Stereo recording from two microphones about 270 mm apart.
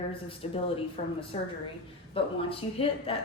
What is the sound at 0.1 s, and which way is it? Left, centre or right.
A woman's voice, centre.